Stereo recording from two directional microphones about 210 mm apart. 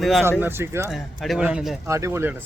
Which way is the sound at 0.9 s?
Centre (ahead or behind).